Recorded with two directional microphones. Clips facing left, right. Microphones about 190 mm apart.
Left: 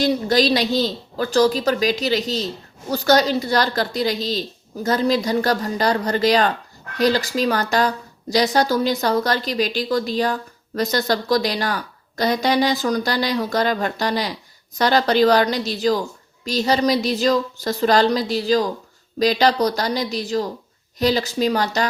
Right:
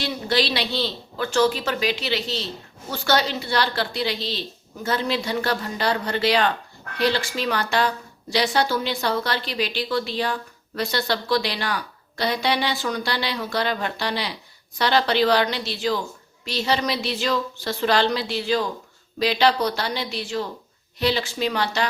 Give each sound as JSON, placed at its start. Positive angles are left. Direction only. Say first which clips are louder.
{"t": 0.0, "sound": "a woman's voice", "louder": "left 6 dB", "side_deg": 40}